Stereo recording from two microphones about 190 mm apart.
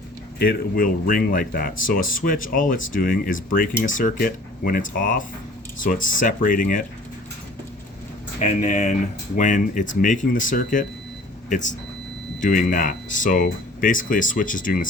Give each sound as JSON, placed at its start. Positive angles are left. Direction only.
{"t": 0.3, "sound": "speech", "side_deg": 50}
{"t": 8.4, "sound": "speech", "side_deg": 40}